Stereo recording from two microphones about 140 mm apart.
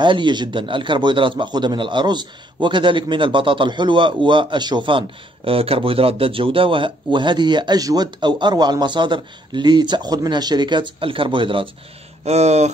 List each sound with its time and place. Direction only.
0.0 s a man's voice: 35° right (ahead or behind)
12.3 s speech: 50° right (ahead or behind)